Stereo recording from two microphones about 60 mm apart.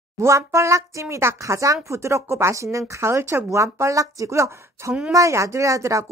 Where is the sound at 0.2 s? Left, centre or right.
Right.